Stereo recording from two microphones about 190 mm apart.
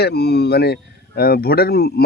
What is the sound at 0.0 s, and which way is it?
Speech, 60° left (ahead or behind).